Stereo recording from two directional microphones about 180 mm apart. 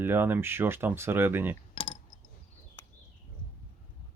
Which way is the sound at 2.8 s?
15° left (ahead or behind).